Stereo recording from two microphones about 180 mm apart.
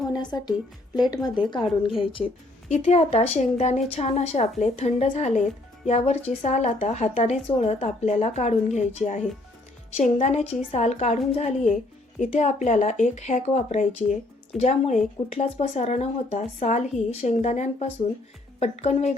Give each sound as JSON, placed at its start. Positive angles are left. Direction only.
{"t": 0.1, "sound": "music", "side_deg": 25}
{"t": 0.9, "sound": "speech", "side_deg": 20}